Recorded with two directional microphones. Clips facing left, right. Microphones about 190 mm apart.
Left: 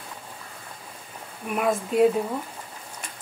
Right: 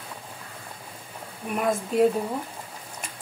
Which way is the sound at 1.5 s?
5° left (ahead or behind).